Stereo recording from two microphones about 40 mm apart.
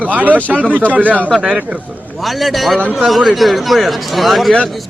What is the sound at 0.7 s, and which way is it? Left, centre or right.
Speech, left.